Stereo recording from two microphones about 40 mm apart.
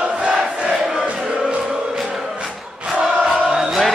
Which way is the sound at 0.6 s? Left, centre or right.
Centre.